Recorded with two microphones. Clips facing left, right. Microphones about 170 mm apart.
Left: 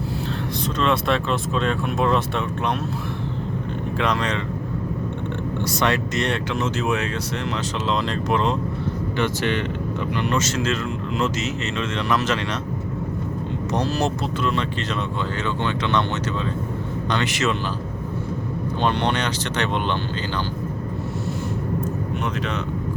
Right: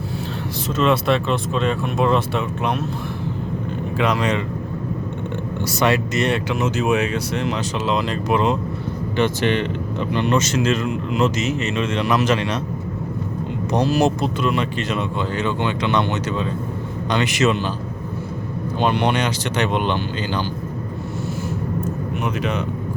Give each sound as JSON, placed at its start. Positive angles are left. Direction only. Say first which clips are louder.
{"t": 0.8, "sound": "speech", "louder": "right 4 dB", "side_deg": -5}
{"t": 3.9, "sound": "speech", "louder": "right 4 dB", "side_deg": -5}
{"t": 5.6, "sound": "speech", "louder": "right 4 dB", "side_deg": -5}
{"t": 9.1, "sound": "speech", "louder": "right 5 dB", "side_deg": -20}
{"t": 13.7, "sound": "speech", "louder": "right 6 dB", "side_deg": -15}
{"t": 17.1, "sound": "speech", "louder": "right 5 dB", "side_deg": -15}
{"t": 18.8, "sound": "speech", "louder": "right 3 dB", "side_deg": -10}